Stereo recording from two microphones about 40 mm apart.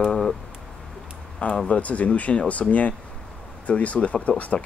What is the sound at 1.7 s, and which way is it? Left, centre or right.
Speech, left.